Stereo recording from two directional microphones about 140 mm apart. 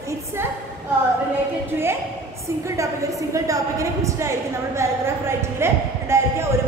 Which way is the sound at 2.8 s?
20° right (ahead or behind).